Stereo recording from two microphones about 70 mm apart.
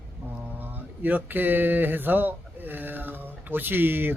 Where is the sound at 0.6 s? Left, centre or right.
Right.